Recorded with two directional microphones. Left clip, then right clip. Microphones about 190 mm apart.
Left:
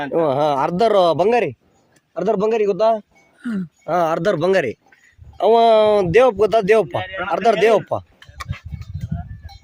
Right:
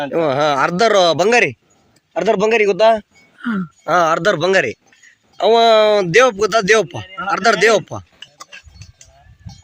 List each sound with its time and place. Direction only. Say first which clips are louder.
0.1 s a man's voice: right 1 dB; 5° left (ahead or behind)
3.3 s a sound: right 5 dB; 30° right (ahead or behind)
4.0 s speech: right 1 dB; 10° left (ahead or behind)